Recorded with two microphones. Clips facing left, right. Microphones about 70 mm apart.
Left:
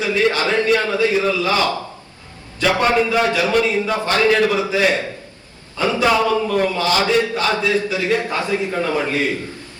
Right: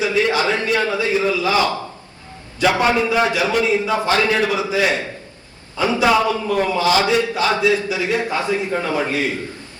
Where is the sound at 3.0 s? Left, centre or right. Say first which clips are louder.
Even; centre.